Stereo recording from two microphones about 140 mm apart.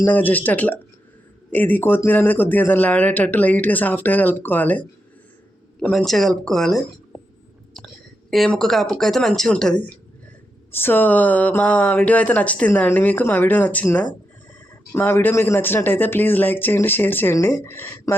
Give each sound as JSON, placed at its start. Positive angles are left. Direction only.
{"t": 0.0, "sound": "speech", "side_deg": 10}
{"t": 8.3, "sound": "speech", "side_deg": 0}